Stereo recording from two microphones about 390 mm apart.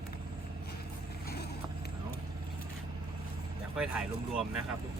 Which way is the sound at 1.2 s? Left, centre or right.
Left.